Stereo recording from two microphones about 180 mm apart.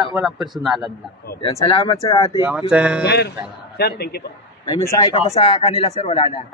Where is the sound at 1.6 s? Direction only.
30° left (ahead or behind).